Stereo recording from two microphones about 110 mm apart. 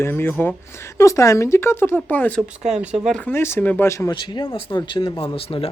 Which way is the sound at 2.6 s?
5° right (ahead or behind).